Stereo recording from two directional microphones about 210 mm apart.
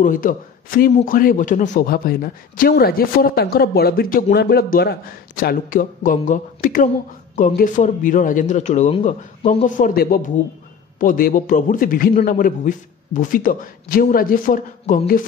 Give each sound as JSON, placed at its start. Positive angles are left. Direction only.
{"t": 0.0, "sound": "a man's voice", "side_deg": 40}